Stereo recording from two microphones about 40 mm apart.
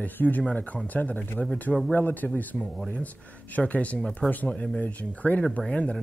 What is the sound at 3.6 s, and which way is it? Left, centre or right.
Speech, left.